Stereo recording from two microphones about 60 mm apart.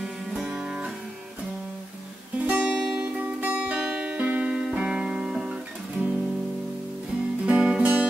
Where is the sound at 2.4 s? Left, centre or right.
Right.